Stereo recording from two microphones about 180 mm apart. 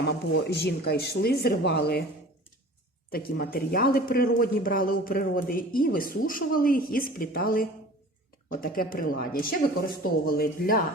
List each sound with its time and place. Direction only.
0.0 s speech: 65° left (ahead or behind)
3.1 s a man's voice: 55° left (ahead or behind)